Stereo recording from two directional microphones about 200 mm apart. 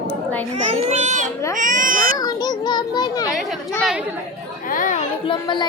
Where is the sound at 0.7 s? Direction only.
35° right (ahead or behind).